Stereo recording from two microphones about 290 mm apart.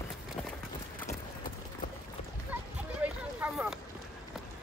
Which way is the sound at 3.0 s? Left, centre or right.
Centre.